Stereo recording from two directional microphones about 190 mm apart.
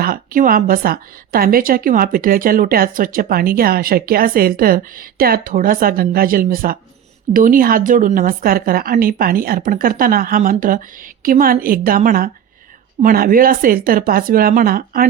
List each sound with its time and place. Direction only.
0.0 s a woman's voice: 50° right (ahead or behind)